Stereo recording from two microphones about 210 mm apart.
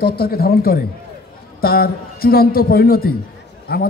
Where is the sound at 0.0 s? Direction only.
50° left (ahead or behind).